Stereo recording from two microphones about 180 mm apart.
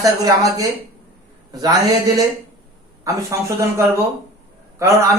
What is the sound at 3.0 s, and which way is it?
A man's voice, 15° right (ahead or behind).